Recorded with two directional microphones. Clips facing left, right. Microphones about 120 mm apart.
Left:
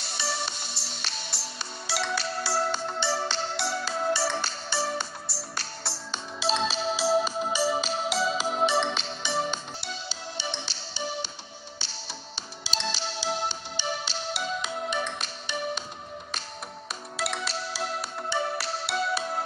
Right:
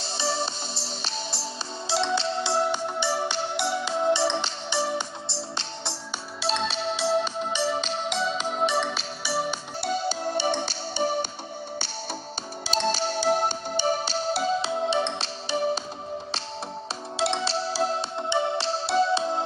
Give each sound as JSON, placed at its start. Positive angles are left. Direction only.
{"t": 0.0, "sound": "music", "side_deg": -30}
{"t": 6.4, "sound": "music", "side_deg": 0}
{"t": 9.8, "sound": "music", "side_deg": -50}
{"t": 12.6, "sound": "music", "side_deg": -50}
{"t": 17.2, "sound": "music", "side_deg": -30}
{"t": 18.1, "sound": "music", "side_deg": -20}